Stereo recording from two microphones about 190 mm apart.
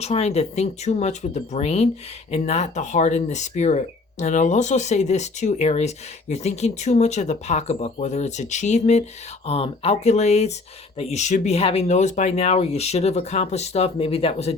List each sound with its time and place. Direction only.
0.0 s speech: 35° left (ahead or behind)